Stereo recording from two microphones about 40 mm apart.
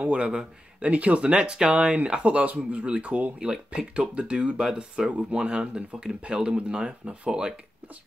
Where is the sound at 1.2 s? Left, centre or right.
Right.